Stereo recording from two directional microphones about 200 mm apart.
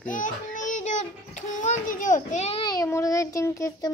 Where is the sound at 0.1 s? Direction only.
40° left (ahead or behind).